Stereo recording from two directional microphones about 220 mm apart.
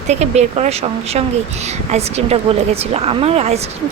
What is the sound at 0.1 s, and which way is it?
Speech, 30° right (ahead or behind).